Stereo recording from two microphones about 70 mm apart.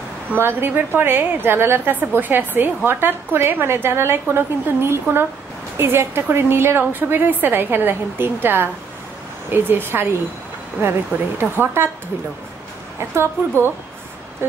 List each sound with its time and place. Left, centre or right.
0.3 s a woman's voice: right
13.1 s a woman's voice: right